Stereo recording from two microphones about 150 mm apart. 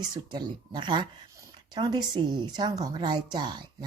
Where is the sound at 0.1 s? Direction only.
30° right (ahead or behind).